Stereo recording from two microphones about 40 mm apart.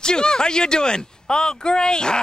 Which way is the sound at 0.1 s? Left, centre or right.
Centre.